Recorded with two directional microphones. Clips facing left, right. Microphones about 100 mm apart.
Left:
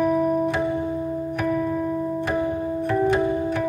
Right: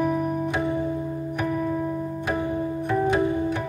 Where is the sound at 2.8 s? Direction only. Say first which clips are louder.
Left 2 dB; 5° right (ahead or behind).